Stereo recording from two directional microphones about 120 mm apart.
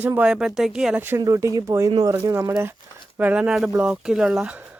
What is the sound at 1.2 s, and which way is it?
Speech, 25° right (ahead or behind).